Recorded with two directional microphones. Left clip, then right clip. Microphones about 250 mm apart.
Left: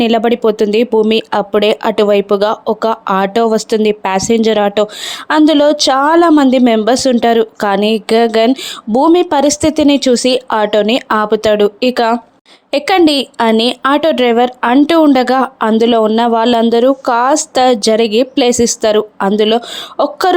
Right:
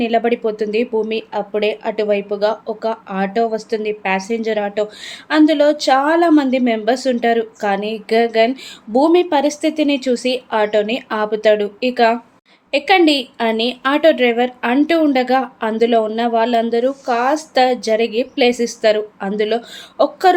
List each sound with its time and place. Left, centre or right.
0.0 s a woman's voice: left